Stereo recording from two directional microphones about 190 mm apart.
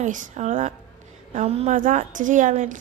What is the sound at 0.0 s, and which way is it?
A woman's voice, 40° right (ahead or behind).